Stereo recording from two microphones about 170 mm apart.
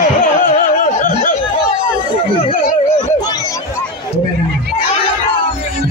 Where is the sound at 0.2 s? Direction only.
50° left (ahead or behind).